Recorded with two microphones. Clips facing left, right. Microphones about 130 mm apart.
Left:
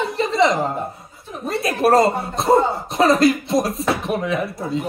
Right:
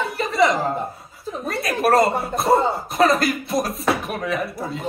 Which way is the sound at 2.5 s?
25° left (ahead or behind).